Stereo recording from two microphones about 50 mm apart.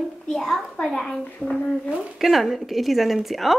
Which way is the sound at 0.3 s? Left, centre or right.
Centre.